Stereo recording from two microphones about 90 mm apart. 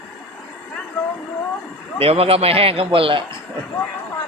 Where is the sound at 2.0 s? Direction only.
90° right.